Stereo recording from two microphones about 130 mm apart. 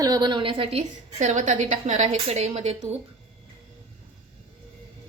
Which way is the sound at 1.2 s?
70° right (ahead or behind).